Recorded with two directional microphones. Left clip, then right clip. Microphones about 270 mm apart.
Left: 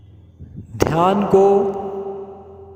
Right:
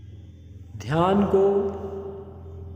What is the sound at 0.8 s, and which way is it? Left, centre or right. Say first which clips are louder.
Speech: left 6 dB; left.